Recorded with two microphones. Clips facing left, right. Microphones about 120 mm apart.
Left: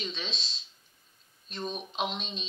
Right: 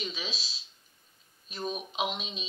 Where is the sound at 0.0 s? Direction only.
5° right (ahead or behind).